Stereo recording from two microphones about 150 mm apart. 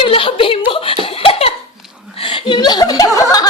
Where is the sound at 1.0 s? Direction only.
35° left (ahead or behind).